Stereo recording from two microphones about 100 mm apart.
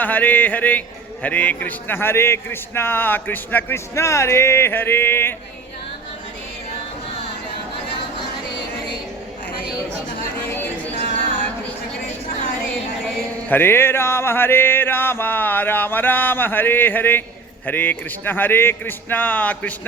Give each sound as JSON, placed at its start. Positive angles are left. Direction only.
{"t": 0.0, "sound": "a man's voice", "side_deg": 15}
{"t": 3.9, "sound": "music", "side_deg": 30}
{"t": 13.5, "sound": "music", "side_deg": 20}